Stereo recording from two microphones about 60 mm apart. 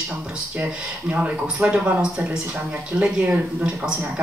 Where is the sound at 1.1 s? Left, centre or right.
Right.